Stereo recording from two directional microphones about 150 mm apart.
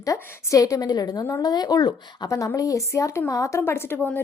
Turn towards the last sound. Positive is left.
turn(degrees=10)  # may be behind; listen again after turning